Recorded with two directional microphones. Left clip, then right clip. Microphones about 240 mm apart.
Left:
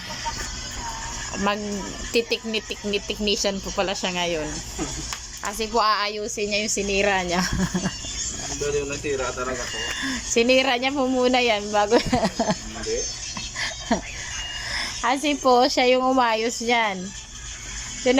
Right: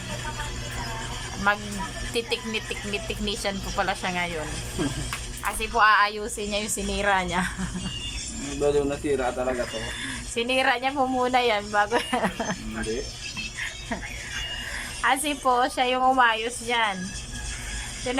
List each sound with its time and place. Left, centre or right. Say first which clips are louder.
1.5 s speech: right 2 dB; centre
5.5 s a woman's voice: right 1 dB; centre
10.0 s speech: left 10 dB; centre
15.0 s speech: left 2 dB; centre
18.1 s speech: left 7 dB; centre